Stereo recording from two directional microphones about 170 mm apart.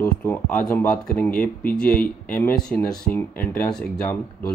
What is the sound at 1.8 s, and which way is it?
Speech, 55° left (ahead or behind).